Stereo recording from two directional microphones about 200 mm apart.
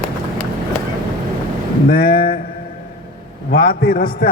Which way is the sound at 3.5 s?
50° left (ahead or behind).